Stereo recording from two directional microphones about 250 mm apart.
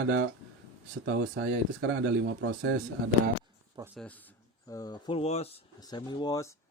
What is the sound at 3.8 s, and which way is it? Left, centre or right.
Speech, centre.